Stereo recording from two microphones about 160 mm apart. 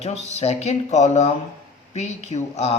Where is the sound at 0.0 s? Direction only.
45° left (ahead or behind).